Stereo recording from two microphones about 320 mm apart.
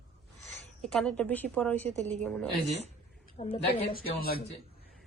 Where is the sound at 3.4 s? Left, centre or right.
Centre.